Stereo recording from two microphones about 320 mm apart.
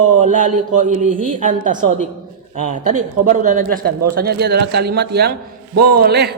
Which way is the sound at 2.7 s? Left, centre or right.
Right.